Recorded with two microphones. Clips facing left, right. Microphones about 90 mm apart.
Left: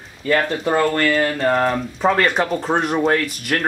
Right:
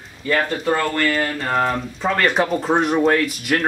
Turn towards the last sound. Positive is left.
turn(degrees=0)  # may be behind; listen again after turning